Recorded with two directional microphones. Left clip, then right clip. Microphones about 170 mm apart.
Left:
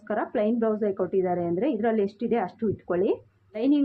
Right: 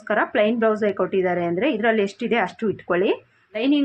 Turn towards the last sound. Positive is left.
turn(degrees=-5)  # may be behind; listen again after turning